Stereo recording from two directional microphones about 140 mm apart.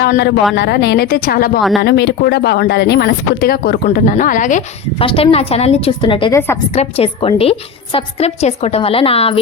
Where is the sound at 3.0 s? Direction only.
90° left; by 4.7 s 65° left (ahead or behind).